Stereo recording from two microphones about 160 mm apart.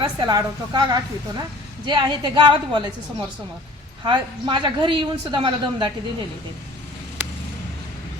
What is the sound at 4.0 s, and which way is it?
A woman's voice, 30° right (ahead or behind).